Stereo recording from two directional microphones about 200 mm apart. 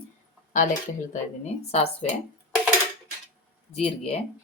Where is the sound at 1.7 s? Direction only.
30° left (ahead or behind).